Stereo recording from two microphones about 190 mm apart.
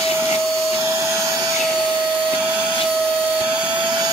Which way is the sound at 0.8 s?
15° right (ahead or behind).